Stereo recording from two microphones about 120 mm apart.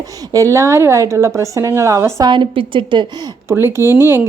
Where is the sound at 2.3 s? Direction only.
45° right (ahead or behind).